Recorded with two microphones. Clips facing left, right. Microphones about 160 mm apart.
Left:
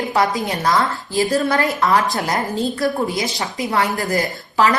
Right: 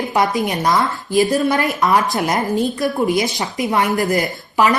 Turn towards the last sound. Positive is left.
turn(degrees=-20)  # may be behind; listen again after turning